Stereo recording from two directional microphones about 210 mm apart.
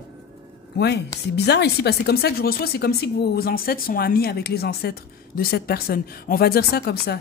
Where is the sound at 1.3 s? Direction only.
50° left (ahead or behind).